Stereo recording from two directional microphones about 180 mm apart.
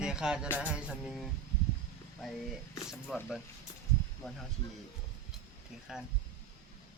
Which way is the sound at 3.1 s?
Centre (ahead or behind).